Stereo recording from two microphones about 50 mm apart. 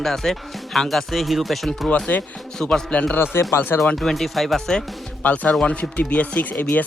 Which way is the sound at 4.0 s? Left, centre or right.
Centre.